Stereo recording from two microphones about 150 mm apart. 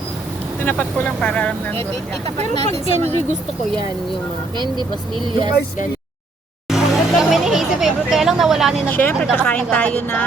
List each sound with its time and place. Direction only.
0.6 s speech: 10° left (ahead or behind)
2.4 s speech: 45° right (ahead or behind)
6.7 s speech: centre (ahead or behind)
8.9 s speech: 10° left (ahead or behind)